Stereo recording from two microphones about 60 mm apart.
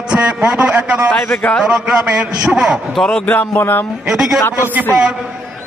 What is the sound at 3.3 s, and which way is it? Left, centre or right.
Speech, left.